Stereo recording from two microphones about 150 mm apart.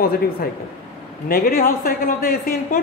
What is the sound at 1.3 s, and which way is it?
Speech, 75° left (ahead or behind).